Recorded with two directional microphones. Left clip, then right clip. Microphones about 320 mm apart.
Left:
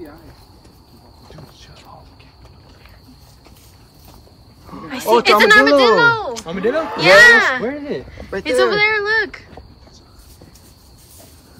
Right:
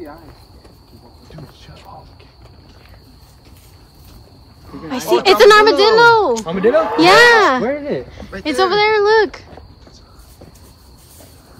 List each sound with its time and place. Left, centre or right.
4.8 s a woman's voice: centre
6.4 s speech: right
7.0 s a woman's voice: centre
7.6 s speech: right
8.5 s a woman's voice: centre